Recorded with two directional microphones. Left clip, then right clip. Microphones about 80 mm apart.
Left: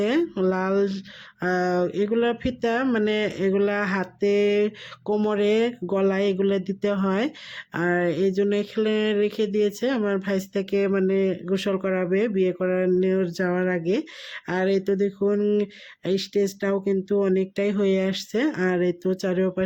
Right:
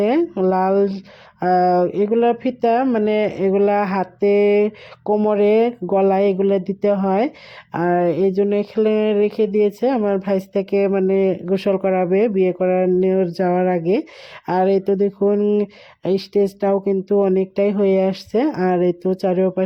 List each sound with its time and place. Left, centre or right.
0.0 s speech: right
15.3 s speech: centre
15.5 s speech: right
17.3 s speech: right